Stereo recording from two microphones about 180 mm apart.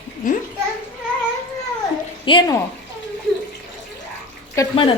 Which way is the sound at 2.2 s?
25° left (ahead or behind).